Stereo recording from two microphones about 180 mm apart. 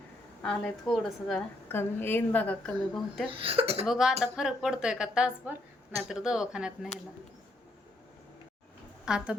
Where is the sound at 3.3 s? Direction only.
30° right (ahead or behind).